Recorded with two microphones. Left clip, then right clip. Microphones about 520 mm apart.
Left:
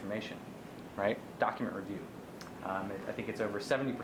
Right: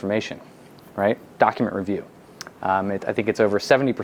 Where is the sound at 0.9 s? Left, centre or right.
Right.